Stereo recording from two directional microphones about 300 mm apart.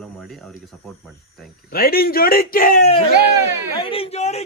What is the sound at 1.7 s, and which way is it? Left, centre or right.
A man's voice, left.